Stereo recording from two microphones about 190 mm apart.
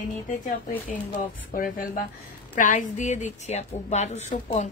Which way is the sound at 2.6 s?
40° left (ahead or behind).